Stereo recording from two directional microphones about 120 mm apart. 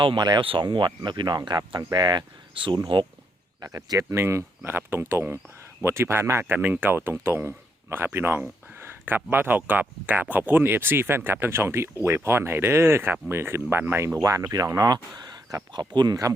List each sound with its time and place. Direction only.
0.0 s speech: 40° right (ahead or behind)
3.6 s speech: 30° right (ahead or behind)